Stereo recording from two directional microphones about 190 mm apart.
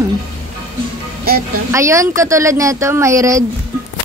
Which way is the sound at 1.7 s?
15° right (ahead or behind).